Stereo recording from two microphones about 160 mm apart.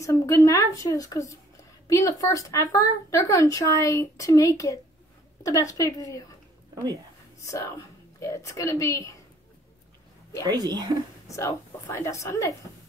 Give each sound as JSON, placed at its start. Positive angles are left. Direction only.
{"t": 0.0, "sound": "a woman's voice", "side_deg": 20}
{"t": 6.7, "sound": "speech", "side_deg": -20}
{"t": 7.5, "sound": "a woman's voice", "side_deg": 20}
{"t": 10.6, "sound": "speech", "side_deg": -25}
{"t": 11.2, "sound": "a woman's voice", "side_deg": 20}